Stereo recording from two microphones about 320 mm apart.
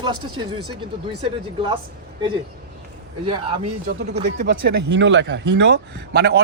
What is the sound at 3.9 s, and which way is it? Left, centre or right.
Speech, right.